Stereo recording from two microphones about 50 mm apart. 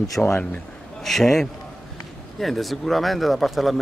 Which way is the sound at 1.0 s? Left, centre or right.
Centre.